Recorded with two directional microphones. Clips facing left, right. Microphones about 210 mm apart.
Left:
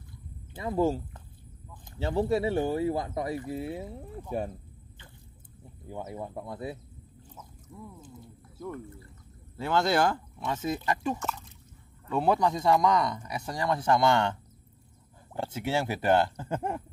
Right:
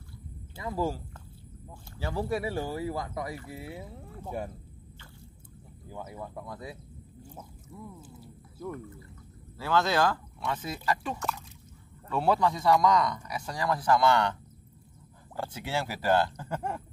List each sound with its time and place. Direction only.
0.6 s speech: 25° left (ahead or behind)
5.9 s speech: 25° left (ahead or behind)
7.7 s a sound: 5° right (ahead or behind)
9.6 s speech: 25° left (ahead or behind)
11.1 s speech: centre (ahead or behind)
12.1 s speech: 20° left (ahead or behind)
15.3 s speech: 20° left (ahead or behind)